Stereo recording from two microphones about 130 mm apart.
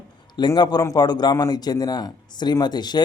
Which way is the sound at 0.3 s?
35° left (ahead or behind).